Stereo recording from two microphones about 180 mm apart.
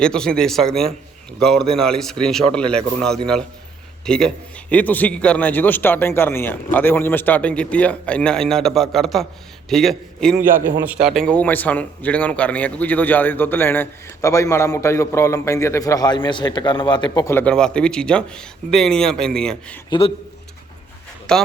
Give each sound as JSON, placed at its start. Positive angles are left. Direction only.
{"t": 0.0, "sound": "a man's voice", "side_deg": 5}
{"t": 17.3, "sound": "speech", "side_deg": 5}
{"t": 19.9, "sound": "a man's voice", "side_deg": 30}
{"t": 21.3, "sound": "speech", "side_deg": 5}